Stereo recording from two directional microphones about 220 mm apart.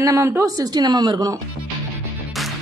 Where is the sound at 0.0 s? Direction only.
15° right (ahead or behind).